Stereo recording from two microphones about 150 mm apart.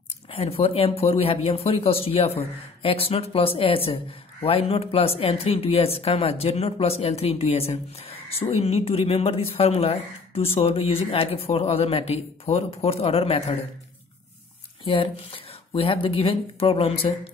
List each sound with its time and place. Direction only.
0.3 s speech: 40° left (ahead or behind)
14.9 s speech: 40° left (ahead or behind)